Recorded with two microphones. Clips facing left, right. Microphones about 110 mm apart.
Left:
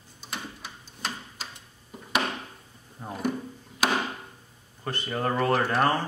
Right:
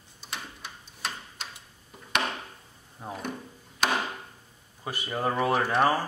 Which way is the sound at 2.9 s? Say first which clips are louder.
Left 5 dB; centre (ahead or behind).